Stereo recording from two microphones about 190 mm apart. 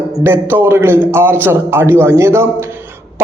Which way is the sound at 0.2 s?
10° right (ahead or behind).